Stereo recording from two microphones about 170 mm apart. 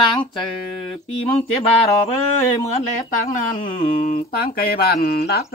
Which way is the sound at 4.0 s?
55° left (ahead or behind).